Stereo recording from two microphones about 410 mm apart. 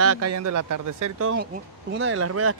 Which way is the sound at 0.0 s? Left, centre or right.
Right.